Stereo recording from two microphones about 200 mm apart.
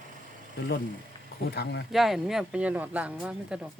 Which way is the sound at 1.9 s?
Centre (ahead or behind).